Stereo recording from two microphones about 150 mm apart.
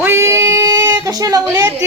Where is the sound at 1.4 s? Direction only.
15° right (ahead or behind).